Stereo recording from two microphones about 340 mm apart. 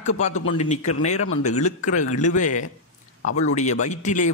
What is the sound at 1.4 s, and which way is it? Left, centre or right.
A man's voice, centre.